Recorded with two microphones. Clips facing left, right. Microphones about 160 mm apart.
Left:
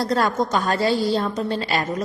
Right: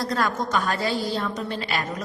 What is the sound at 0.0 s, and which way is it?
A woman's voice, 30° left (ahead or behind).